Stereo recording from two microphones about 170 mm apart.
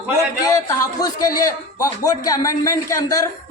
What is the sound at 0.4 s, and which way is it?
A man's voice, 20° left (ahead or behind).